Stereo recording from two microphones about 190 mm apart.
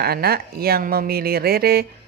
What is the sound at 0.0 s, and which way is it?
Speech, 55° right (ahead or behind).